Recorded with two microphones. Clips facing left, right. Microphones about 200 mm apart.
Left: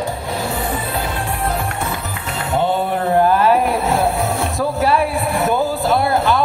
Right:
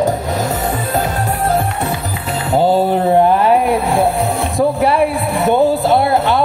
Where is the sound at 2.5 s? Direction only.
35° right (ahead or behind).